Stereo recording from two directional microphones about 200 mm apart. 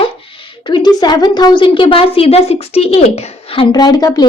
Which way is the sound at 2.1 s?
30° left (ahead or behind).